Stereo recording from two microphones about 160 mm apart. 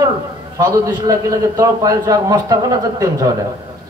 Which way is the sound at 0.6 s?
20° right (ahead or behind).